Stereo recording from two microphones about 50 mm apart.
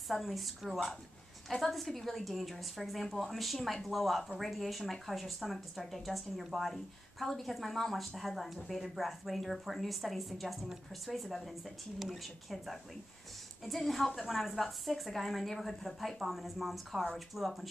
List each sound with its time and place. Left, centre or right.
0.1 s speech: centre